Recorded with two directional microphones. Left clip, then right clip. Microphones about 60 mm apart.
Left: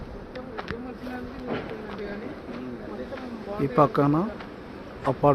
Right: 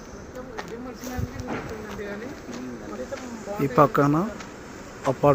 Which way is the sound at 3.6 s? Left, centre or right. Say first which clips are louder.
Right 2 dB; right.